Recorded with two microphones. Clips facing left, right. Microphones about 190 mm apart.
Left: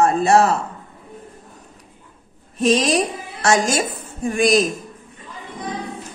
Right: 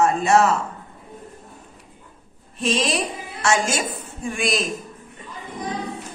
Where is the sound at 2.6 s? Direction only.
45° left (ahead or behind).